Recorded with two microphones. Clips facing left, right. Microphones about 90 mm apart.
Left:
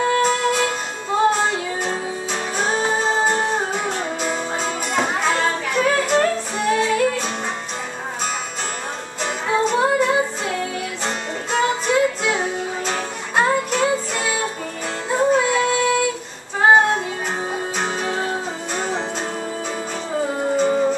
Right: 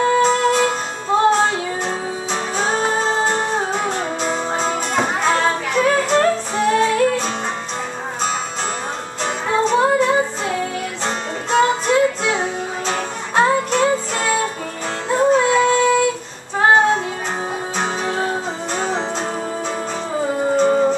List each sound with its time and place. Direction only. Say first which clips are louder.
0.0 s music: right 3 dB; centre (ahead or behind)
9.2 s music: right 1 dB; 5° left (ahead or behind)
16.5 s female singing: even; centre (ahead or behind)
17.7 s music: right 4 dB; centre (ahead or behind)
20.6 s music: right 3 dB; 30° right (ahead or behind)